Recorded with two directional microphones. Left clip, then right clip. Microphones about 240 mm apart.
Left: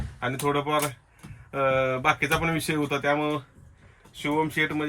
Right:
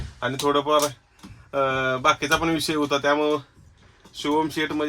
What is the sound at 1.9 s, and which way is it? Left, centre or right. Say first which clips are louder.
Speech: right 3 dB; centre.